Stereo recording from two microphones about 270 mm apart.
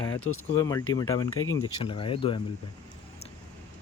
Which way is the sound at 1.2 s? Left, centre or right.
Left.